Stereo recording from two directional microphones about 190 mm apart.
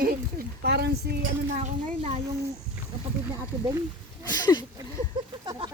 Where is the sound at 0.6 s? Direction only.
60° right (ahead or behind).